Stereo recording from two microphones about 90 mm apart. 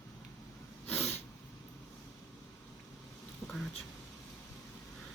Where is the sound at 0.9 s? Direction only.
25° left (ahead or behind).